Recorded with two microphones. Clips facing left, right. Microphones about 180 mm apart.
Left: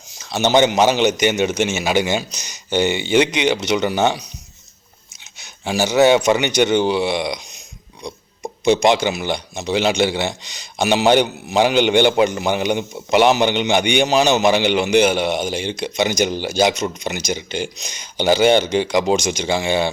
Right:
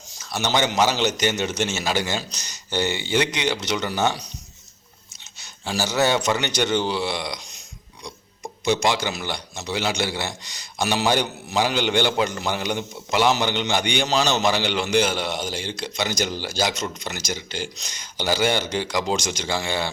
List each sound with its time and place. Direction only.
0.3 s a man's voice: 25° left (ahead or behind)
5.2 s speech: 15° left (ahead or behind)
8.6 s a man's voice: 20° left (ahead or behind)